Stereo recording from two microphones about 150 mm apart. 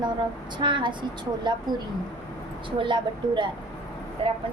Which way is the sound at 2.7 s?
35° right (ahead or behind).